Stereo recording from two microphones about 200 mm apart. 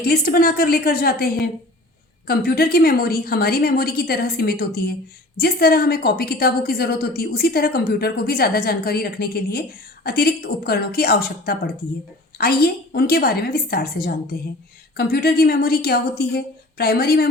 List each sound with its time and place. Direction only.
0.0 s a woman's voice: 50° left (ahead or behind)